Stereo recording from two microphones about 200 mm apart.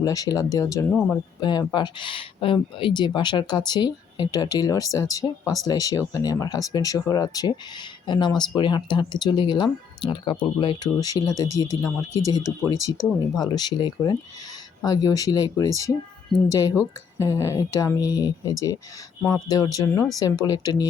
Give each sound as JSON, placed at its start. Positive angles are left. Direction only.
{"t": 0.0, "sound": "speech", "side_deg": 15}
{"t": 0.9, "sound": "speech", "side_deg": 0}
{"t": 1.4, "sound": "speech", "side_deg": 20}